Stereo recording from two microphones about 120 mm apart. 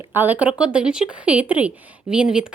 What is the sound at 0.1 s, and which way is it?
A woman's voice, 15° right (ahead or behind).